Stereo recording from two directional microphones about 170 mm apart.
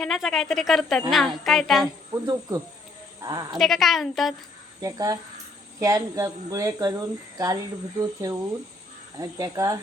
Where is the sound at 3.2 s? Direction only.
20° right (ahead or behind).